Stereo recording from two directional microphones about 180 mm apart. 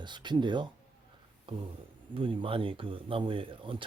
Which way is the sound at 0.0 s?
25° right (ahead or behind).